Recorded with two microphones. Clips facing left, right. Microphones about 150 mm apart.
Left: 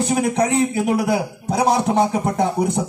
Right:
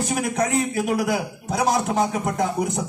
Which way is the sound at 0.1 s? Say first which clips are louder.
Left 4 dB; 25° left (ahead or behind).